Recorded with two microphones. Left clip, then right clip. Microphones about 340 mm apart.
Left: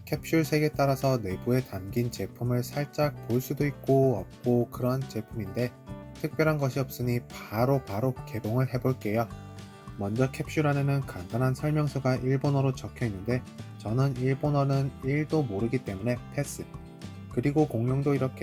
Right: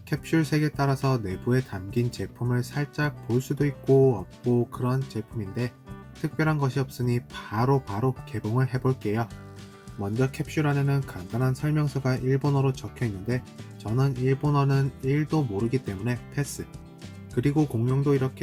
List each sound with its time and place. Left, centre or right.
0.1 s speech: centre